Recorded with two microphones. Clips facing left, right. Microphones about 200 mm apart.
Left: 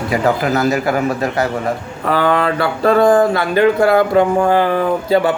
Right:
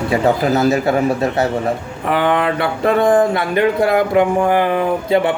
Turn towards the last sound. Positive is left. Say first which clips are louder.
# left 1 dB
turn(degrees=-20)  # may be behind; listen again after turning